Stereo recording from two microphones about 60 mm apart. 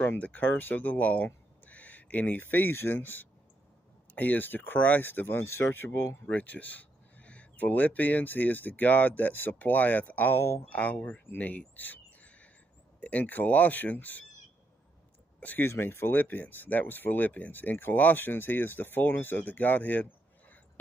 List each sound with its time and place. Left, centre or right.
0.2 s speech: left
6.2 s speech: left
11.2 s a sound: left
13.0 s speech: left
15.6 s speech: left